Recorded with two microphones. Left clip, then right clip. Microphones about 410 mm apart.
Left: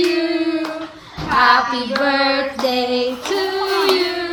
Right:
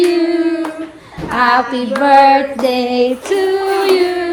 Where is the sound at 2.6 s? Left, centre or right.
Right.